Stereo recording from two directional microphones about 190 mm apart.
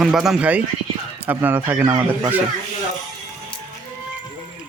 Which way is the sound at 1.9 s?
25° right (ahead or behind).